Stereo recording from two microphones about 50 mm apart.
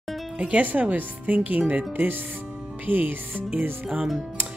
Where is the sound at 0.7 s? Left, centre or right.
Right.